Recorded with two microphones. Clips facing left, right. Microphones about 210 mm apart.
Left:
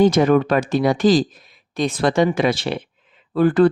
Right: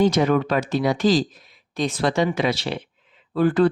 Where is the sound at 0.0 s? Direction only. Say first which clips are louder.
Left 4 dB; 50° left (ahead or behind).